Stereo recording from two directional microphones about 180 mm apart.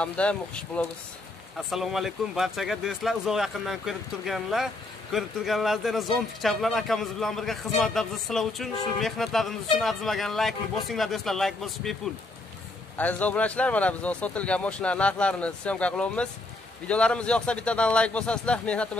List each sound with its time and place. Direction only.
0.0 s speech: 5° left (ahead or behind)